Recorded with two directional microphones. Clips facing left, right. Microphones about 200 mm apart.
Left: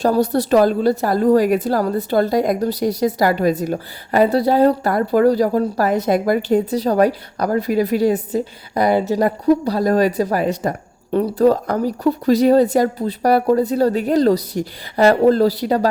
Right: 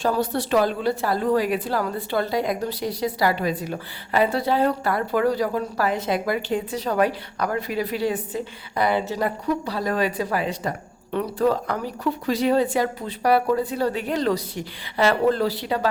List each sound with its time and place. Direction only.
0.0 s a woman's voice: 40° left (ahead or behind)